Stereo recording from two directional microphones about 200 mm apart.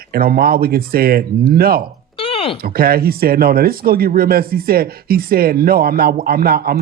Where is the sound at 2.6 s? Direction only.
50° right (ahead or behind).